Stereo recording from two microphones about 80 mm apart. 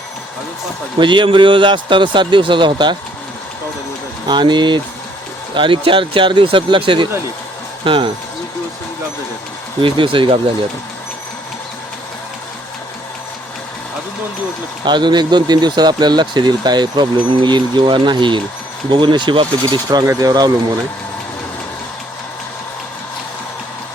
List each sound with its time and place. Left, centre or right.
0.9 s speech: right
4.3 s speech: right
5.5 s speech: right
9.8 s speech: right
14.8 s speech: right